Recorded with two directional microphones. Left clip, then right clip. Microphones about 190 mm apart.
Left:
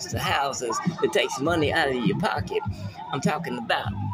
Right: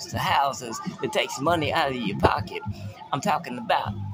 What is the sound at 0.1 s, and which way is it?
Speech, 15° right (ahead or behind).